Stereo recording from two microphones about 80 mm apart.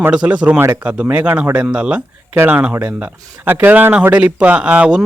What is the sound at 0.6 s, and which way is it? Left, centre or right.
Speech, right.